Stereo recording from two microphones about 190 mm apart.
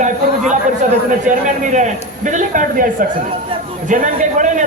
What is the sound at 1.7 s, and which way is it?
A man's voice, 40° right (ahead or behind).